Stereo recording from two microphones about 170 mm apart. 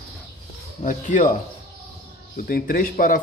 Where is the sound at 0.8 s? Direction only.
50° left (ahead or behind).